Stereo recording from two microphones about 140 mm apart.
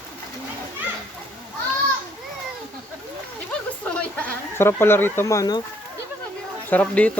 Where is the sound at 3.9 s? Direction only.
10° left (ahead or behind); by 5.6 s 25° left (ahead or behind).